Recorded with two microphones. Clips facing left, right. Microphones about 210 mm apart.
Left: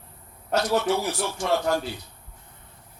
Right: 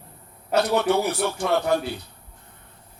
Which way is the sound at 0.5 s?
60° right (ahead or behind).